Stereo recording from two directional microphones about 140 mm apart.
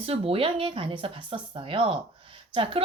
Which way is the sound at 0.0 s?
45° right (ahead or behind).